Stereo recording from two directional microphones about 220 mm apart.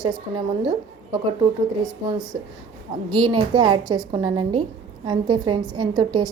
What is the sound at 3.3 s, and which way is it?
A woman's voice, 25° right (ahead or behind).